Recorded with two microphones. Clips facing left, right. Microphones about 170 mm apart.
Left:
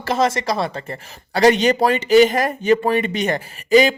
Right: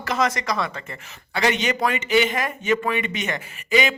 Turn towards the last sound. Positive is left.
turn(degrees=35)  # may be behind; listen again after turning